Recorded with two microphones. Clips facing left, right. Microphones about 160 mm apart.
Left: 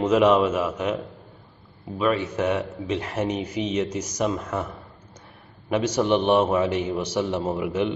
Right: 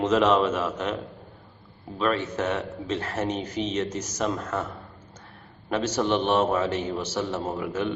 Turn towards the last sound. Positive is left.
turn(degrees=15)  # may be behind; listen again after turning